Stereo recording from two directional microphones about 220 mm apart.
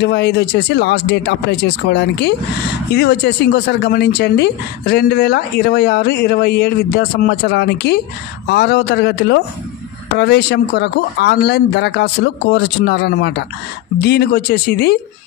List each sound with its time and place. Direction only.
0.0 s speech: 50° left (ahead or behind)